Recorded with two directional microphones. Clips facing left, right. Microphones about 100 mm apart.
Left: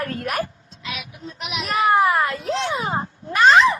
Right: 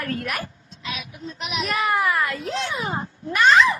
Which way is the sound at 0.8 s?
35° right (ahead or behind).